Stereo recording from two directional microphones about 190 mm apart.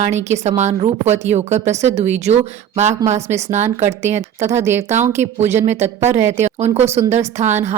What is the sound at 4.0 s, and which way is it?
Speech, 35° right (ahead or behind).